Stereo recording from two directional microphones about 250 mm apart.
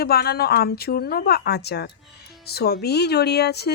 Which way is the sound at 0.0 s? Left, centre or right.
Left.